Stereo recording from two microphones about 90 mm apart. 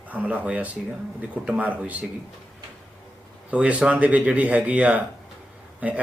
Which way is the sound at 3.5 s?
15° right (ahead or behind).